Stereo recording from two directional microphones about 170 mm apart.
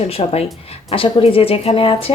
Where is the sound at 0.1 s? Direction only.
35° left (ahead or behind).